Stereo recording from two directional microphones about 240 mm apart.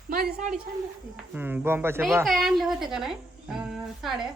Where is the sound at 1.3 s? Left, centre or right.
Centre.